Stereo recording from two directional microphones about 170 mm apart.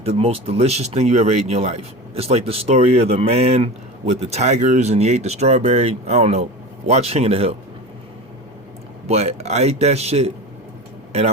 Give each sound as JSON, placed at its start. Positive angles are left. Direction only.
{"t": 0.0, "sound": "speech", "side_deg": -35}
{"t": 9.0, "sound": "speech", "side_deg": -40}